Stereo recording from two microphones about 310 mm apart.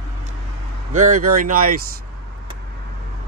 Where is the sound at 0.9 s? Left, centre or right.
Right.